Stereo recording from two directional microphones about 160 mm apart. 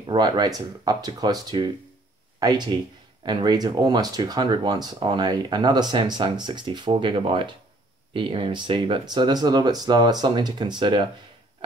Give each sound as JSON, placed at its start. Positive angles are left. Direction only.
{"t": 0.0, "sound": "speech", "side_deg": -25}